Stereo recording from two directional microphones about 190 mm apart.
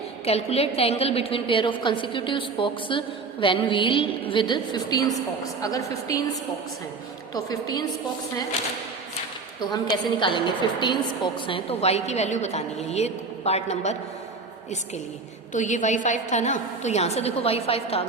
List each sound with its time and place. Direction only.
0.3 s a woman's voice: 30° left (ahead or behind)
7.3 s a woman's voice: 20° left (ahead or behind)
9.9 s a woman's voice: 25° left (ahead or behind)
15.5 s a woman's voice: 40° left (ahead or behind)